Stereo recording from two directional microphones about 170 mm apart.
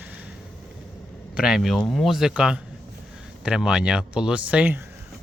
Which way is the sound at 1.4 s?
5° right (ahead or behind).